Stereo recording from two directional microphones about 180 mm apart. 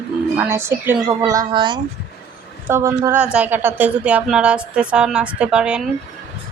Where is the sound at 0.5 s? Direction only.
15° right (ahead or behind).